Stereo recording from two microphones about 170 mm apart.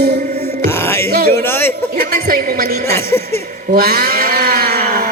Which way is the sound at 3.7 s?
60° right (ahead or behind).